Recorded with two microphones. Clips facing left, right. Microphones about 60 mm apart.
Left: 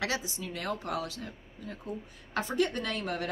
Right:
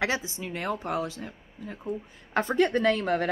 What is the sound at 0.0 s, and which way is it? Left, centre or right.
A woman's voice, right.